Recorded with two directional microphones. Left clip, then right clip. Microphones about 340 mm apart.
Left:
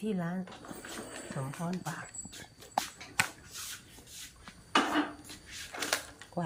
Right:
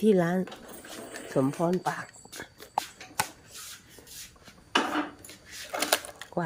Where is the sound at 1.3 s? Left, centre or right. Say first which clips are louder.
Right 17 dB; right.